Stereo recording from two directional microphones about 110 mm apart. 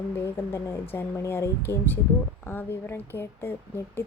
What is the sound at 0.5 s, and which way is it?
Speech, 20° left (ahead or behind).